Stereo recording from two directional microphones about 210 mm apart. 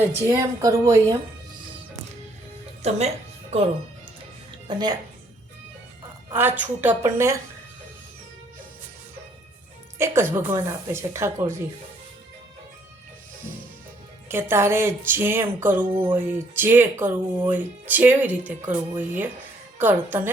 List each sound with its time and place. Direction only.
0.3 s speech: 15° right (ahead or behind)
2.8 s speech: 30° right (ahead or behind)
4.7 s a woman's voice: 20° right (ahead or behind)
6.3 s speech: 10° right (ahead or behind)
10.0 s speech: 10° right (ahead or behind)
14.3 s speech: 10° right (ahead or behind)